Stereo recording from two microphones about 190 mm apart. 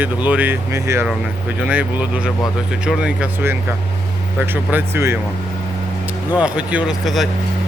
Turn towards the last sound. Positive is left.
turn(degrees=0)  # may be behind; listen again after turning